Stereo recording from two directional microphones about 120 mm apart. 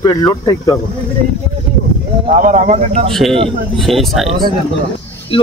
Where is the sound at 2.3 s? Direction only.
85° right.